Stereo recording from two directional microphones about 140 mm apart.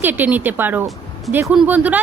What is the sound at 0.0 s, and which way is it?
A woman's voice, 15° right (ahead or behind).